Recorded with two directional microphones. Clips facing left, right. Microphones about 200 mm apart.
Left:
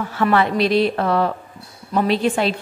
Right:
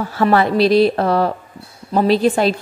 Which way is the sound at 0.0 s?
40° right (ahead or behind).